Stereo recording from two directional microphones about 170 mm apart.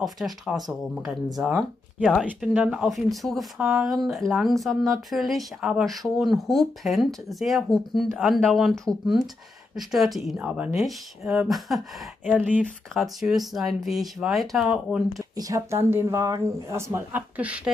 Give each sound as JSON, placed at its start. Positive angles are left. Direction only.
{"t": 0.0, "sound": "speech", "side_deg": 0}
{"t": 15.3, "sound": "speech", "side_deg": -20}